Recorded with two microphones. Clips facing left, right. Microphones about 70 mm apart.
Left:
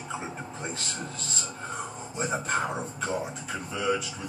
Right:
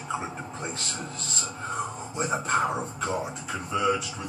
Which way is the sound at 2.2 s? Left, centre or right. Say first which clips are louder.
Right 3 dB; centre.